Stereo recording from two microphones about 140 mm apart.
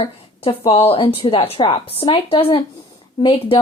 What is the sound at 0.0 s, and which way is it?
A woman's voice, 40° left (ahead or behind).